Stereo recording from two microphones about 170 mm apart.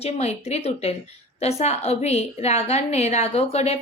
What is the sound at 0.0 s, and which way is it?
A woman's voice, 40° left (ahead or behind).